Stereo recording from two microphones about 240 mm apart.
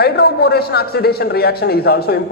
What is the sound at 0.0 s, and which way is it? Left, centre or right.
A man's voice, left.